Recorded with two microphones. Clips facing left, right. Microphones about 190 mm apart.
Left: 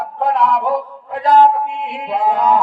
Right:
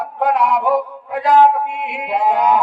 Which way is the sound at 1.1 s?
10° right (ahead or behind).